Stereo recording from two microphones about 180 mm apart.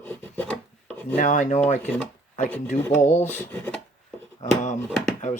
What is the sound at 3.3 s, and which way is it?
Filing, 10° left (ahead or behind).